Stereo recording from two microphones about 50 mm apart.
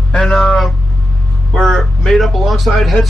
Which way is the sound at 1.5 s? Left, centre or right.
Centre.